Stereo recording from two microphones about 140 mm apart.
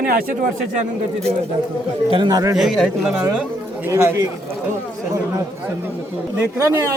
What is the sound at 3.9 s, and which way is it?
Speech, 20° right (ahead or behind).